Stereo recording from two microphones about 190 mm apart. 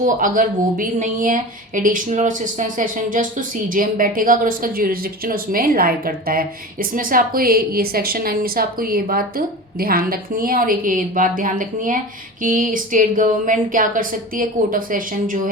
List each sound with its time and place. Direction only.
0.0 s a woman's voice: 45° right (ahead or behind)